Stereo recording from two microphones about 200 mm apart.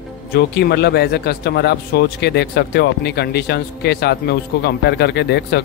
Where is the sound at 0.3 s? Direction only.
55° left (ahead or behind).